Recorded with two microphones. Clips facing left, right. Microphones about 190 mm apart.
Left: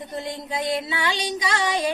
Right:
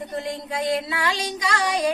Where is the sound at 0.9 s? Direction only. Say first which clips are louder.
Even; centre (ahead or behind).